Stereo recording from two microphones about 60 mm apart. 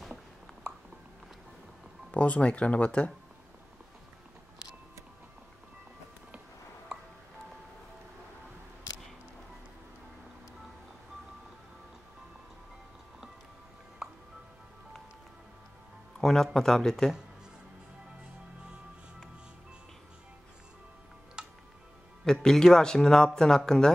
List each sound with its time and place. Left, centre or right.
2.0 s speech: left
16.2 s music: centre
16.5 s speech: centre
21.4 s music: centre
22.2 s speech: centre